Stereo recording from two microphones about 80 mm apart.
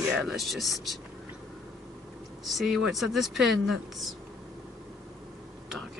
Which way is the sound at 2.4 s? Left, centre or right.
Centre.